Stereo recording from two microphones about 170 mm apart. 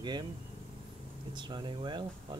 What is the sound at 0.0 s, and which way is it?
Speech, 25° right (ahead or behind).